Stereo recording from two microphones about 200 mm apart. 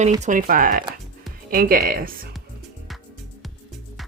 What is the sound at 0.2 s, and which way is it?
Speech, 40° right (ahead or behind).